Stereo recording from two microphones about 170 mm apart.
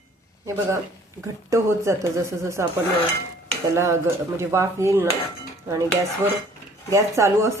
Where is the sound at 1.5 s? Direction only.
15° right (ahead or behind).